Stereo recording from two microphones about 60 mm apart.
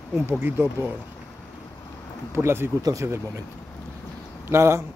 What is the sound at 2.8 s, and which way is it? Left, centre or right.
Speech, right.